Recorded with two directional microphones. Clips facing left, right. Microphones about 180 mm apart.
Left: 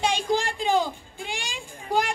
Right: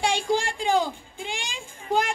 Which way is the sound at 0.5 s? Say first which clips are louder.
Even; 15° right (ahead or behind).